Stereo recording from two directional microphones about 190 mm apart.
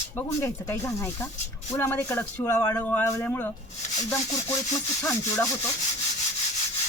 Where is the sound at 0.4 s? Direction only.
15° left (ahead or behind).